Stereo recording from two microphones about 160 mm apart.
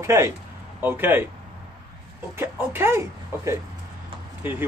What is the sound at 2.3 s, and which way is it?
Speech, 15° right (ahead or behind).